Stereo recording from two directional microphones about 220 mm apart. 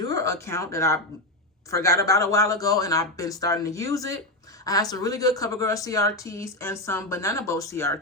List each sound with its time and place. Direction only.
0.1 s speech: 15° left (ahead or behind)